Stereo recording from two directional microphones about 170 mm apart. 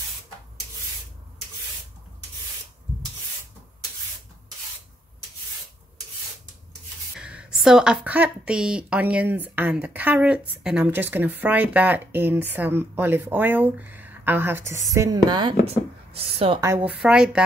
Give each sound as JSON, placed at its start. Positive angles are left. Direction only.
{"t": 7.2, "sound": "a woman's voice", "side_deg": -5}
{"t": 15.6, "sound": "a sound", "side_deg": -35}
{"t": 16.6, "sound": "a woman's voice", "side_deg": -10}